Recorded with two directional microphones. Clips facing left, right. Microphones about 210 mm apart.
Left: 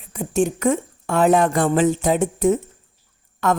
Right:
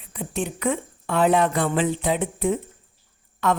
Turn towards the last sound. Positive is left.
turn(degrees=50)  # may be behind; listen again after turning